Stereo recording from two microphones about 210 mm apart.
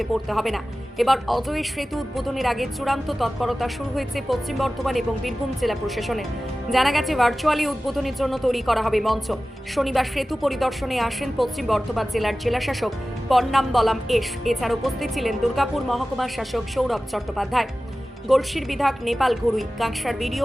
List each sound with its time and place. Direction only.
0.0 s speech: centre (ahead or behind)